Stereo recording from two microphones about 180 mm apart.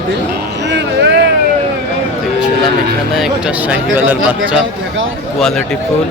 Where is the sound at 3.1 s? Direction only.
5° right (ahead or behind).